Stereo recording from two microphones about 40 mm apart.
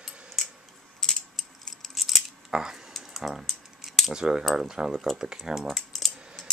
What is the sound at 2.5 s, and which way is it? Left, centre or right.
Cutlery, centre.